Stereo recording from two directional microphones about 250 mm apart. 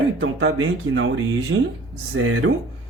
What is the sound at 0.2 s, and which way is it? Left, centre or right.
Speech, right.